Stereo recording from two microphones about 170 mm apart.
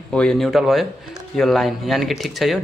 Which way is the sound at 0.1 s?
5° left (ahead or behind).